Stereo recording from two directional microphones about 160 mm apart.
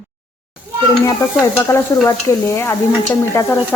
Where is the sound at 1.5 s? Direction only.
15° left (ahead or behind).